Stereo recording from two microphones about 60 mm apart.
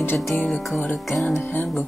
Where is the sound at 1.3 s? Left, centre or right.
Left.